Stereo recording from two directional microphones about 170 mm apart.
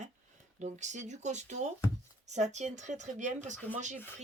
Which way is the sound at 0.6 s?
45° right (ahead or behind).